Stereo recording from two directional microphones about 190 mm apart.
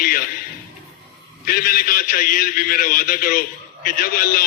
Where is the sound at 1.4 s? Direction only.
50° left (ahead or behind).